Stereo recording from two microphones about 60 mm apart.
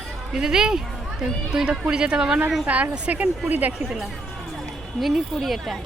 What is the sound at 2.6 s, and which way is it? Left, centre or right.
A woman's voice, right.